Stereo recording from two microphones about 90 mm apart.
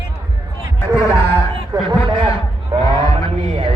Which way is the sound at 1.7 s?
50° right (ahead or behind).